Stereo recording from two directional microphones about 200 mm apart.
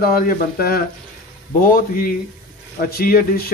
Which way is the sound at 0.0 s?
45° left (ahead or behind).